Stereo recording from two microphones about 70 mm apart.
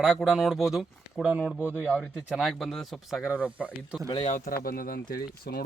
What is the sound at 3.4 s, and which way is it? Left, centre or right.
Speech, centre.